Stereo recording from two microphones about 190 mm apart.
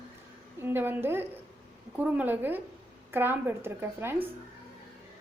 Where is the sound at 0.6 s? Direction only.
10° right (ahead or behind).